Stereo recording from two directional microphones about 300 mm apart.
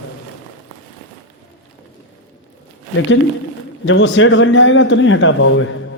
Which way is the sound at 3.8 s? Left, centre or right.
Left.